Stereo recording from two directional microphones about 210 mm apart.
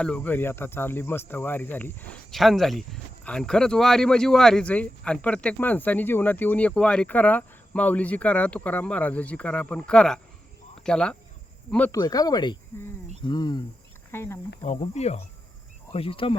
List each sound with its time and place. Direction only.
0.0 s speech: 5° left (ahead or behind)
14.6 s cricket: 30° left (ahead or behind)
15.9 s speech: 25° left (ahead or behind)